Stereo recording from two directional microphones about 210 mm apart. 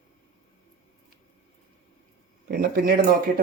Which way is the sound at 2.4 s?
45° right (ahead or behind).